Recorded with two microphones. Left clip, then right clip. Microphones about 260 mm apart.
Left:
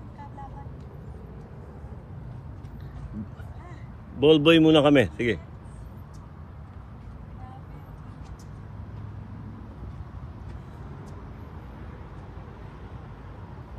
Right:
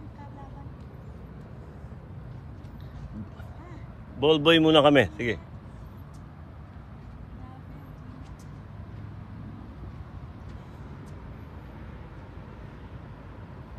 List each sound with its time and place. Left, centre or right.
4.2 s a man's voice: right